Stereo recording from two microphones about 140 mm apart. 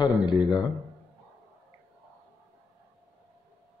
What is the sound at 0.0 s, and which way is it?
Speech, 30° left (ahead or behind).